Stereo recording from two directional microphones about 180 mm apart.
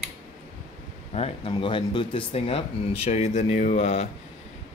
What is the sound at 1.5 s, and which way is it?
Speech, 25° left (ahead or behind).